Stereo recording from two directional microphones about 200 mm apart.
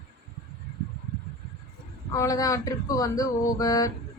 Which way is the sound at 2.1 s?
15° left (ahead or behind).